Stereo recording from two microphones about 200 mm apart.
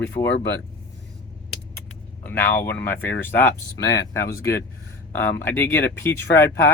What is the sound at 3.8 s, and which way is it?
Speech, 60° left (ahead or behind).